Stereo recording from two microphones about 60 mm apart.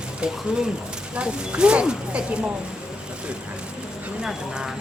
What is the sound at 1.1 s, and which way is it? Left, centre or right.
Speech, centre.